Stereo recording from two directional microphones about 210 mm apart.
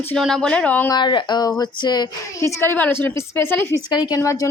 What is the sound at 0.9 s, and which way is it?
Speech, 20° left (ahead or behind).